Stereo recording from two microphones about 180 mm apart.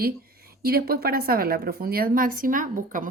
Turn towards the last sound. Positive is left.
turn(degrees=-50)  # may be behind; listen again after turning